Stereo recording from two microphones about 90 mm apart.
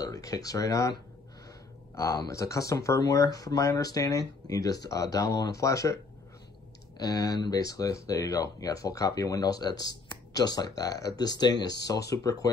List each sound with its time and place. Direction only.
0.0 s speech: 40° left (ahead or behind)
2.0 s speech: 35° left (ahead or behind)
7.0 s speech: 45° left (ahead or behind)